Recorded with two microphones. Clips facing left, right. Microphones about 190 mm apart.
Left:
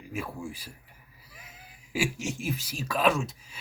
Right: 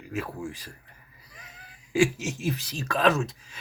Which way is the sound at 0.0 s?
10° left (ahead or behind).